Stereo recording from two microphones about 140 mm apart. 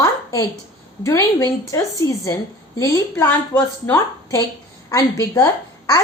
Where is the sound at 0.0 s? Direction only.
25° left (ahead or behind).